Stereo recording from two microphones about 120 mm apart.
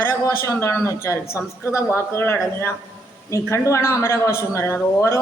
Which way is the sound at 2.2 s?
20° left (ahead or behind).